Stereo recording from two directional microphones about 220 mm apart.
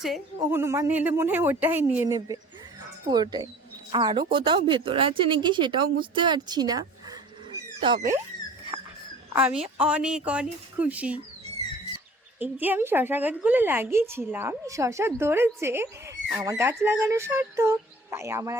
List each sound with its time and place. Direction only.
0.3 s a woman's voice: 10° right (ahead or behind)
8.7 s dog: 15° right (ahead or behind)
9.6 s speech: 5° right (ahead or behind)
12.4 s a woman's voice: 10° right (ahead or behind)